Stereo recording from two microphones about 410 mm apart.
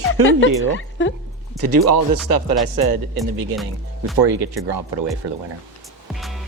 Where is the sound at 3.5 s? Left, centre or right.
Centre.